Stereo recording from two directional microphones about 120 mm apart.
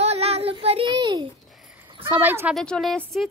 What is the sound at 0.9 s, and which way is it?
Speech, 35° right (ahead or behind).